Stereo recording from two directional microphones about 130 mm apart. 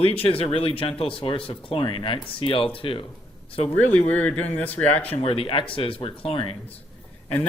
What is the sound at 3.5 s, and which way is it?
Speech, 55° left (ahead or behind).